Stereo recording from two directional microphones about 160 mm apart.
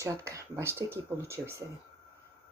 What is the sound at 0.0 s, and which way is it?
Speech, 20° right (ahead or behind).